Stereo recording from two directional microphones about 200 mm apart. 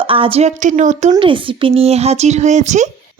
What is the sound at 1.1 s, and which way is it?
Speech, 25° right (ahead or behind).